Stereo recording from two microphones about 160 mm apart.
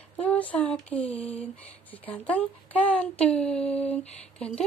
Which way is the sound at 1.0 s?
40° left (ahead or behind).